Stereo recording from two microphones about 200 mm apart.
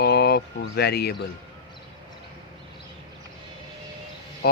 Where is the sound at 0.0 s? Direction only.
55° left (ahead or behind).